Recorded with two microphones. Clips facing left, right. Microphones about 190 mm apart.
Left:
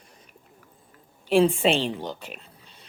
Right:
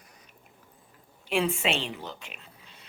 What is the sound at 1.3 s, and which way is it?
Speech, 30° left (ahead or behind).